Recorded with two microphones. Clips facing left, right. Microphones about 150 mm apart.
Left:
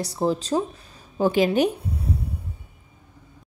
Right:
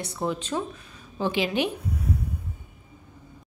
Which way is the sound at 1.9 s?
30° left (ahead or behind).